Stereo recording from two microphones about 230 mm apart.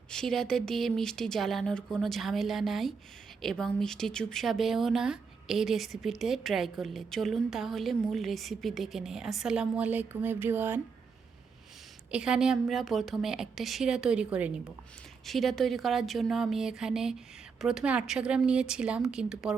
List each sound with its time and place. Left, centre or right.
0.1 s speech: centre
12.1 s speech: centre